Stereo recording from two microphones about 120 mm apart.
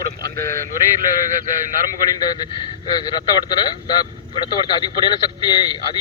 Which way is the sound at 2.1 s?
35° left (ahead or behind).